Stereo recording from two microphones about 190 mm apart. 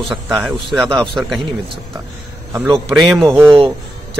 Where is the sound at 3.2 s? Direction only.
15° right (ahead or behind).